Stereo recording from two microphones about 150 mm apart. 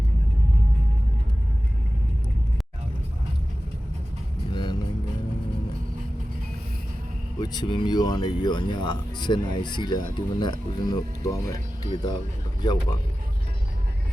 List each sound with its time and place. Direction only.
4.5 s music: 30° left (ahead or behind)
7.3 s speech: 25° left (ahead or behind)